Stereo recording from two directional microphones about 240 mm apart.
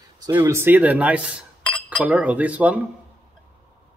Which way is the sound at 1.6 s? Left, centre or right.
Centre.